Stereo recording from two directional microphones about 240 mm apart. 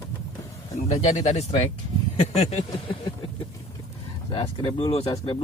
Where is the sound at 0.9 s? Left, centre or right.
Left.